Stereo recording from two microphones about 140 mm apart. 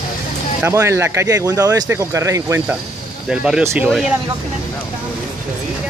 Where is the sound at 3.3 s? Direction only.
5° right (ahead or behind).